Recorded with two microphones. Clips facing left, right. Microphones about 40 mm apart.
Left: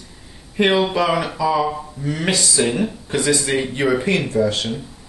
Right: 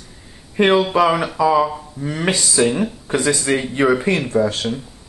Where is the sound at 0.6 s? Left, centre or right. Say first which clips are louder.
Right 2 dB; centre.